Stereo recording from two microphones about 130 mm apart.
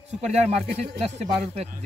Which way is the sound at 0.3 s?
55° right (ahead or behind).